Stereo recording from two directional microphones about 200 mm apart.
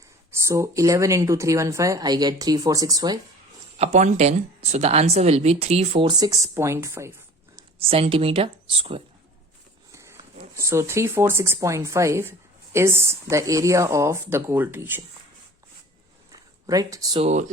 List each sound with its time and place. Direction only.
0.3 s speech: 15° right (ahead or behind)
3.8 s speech: 35° right (ahead or behind); by 7.6 s 15° right (ahead or behind)
7.9 s speech: 30° right (ahead or behind)
9.9 s a sound: 15° right (ahead or behind)
10.6 s speech: 15° right (ahead or behind)
16.3 s a sound: 20° right (ahead or behind)
17.2 s speech: 35° right (ahead or behind)